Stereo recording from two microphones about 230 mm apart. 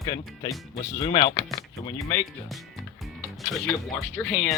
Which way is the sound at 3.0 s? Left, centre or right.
Centre.